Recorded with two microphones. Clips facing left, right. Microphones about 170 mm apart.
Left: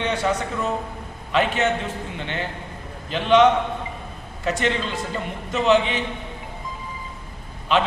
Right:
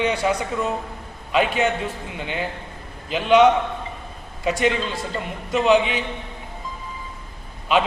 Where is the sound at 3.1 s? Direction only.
10° right (ahead or behind).